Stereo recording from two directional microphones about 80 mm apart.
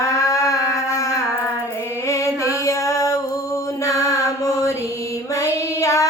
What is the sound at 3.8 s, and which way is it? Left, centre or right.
Mantra, left.